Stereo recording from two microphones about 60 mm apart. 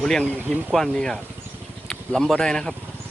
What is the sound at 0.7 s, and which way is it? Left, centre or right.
Speech, centre.